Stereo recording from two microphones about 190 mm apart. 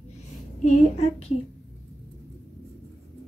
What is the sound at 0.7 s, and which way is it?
Speech, 35° left (ahead or behind).